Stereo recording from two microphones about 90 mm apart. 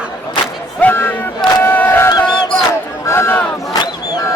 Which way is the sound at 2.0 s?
50° left (ahead or behind).